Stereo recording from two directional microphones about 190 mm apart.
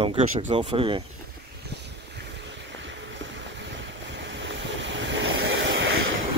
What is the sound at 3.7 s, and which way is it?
Vehicle, 70° right (ahead or behind).